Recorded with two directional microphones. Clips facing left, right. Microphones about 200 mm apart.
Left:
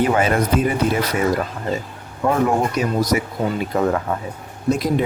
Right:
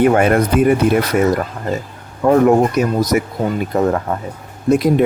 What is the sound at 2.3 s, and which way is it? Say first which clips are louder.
Speech: right 8 dB; 45° right (ahead or behind).